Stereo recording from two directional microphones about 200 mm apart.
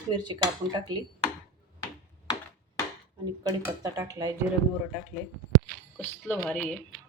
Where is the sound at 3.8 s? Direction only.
15° right (ahead or behind).